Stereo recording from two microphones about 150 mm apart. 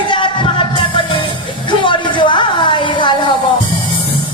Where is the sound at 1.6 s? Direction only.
30° left (ahead or behind).